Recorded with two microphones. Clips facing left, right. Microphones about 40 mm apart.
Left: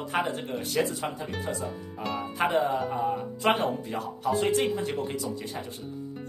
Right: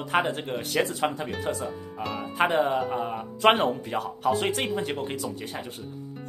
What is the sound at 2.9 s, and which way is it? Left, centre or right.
Speech, right.